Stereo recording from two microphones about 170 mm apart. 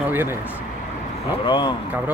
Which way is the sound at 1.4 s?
25° left (ahead or behind).